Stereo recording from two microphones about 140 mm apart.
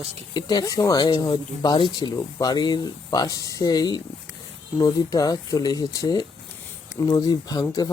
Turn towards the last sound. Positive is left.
turn(degrees=25)  # may be behind; listen again after turning